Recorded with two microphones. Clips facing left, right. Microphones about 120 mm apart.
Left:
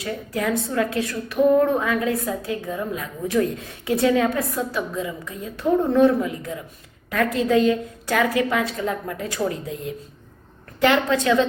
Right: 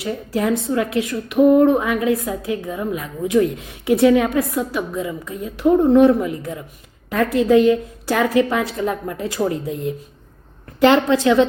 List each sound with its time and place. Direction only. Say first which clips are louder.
0.0 s a woman's voice: right 4 dB; 25° right (ahead or behind)